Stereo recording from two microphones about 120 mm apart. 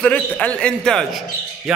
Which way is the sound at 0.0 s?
10° left (ahead or behind).